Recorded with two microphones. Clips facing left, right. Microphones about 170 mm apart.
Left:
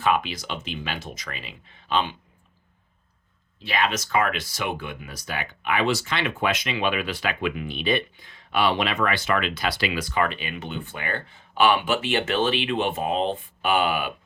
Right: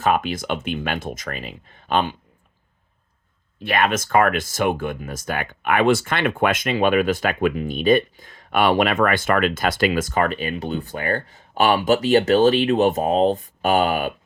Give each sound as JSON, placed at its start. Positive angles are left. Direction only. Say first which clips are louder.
{"t": 0.0, "sound": "speech", "louder": "right 3 dB", "side_deg": -45}
{"t": 3.6, "sound": "speech", "louder": "right 5 dB", "side_deg": -55}